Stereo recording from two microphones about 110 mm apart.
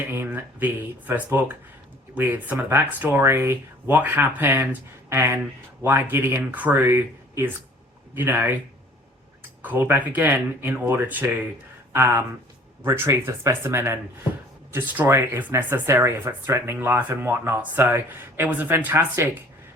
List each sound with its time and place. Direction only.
0.0 s speech: 20° right (ahead or behind)
9.6 s speech: 15° right (ahead or behind)